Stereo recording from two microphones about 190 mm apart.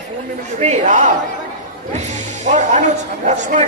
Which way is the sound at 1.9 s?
40° right (ahead or behind).